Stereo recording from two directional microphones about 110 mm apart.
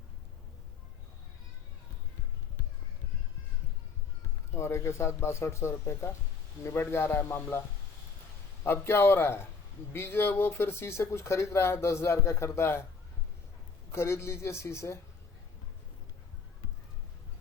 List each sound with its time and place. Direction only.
4.5 s speech: 25° left (ahead or behind)
8.6 s speech: 20° left (ahead or behind)
13.9 s speech: 25° left (ahead or behind)